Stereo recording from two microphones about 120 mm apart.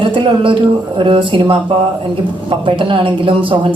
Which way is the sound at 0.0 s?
45° right (ahead or behind).